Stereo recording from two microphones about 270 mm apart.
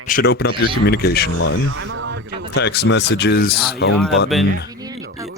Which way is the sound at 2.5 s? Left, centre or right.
Left.